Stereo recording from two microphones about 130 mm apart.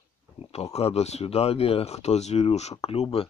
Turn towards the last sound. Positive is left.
turn(degrees=50)  # may be behind; listen again after turning